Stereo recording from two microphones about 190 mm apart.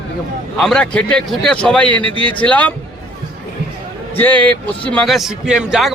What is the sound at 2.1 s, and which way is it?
Speech, 25° right (ahead or behind).